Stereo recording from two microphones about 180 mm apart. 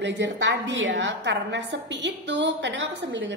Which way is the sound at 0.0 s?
80° right.